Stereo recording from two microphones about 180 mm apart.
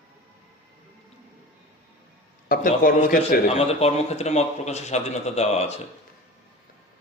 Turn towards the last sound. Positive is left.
turn(degrees=35)  # may be behind; listen again after turning